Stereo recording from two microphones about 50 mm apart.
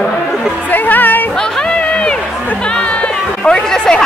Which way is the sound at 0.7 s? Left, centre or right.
Left.